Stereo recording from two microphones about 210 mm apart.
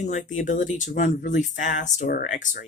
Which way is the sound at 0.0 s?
35° left (ahead or behind).